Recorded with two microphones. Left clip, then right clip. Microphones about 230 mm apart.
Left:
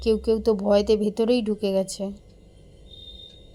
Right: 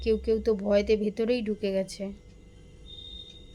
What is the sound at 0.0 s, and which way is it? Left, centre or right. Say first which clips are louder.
A woman's voice: left 4 dB; centre.